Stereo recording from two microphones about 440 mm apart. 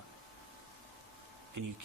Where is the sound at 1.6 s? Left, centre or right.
Right.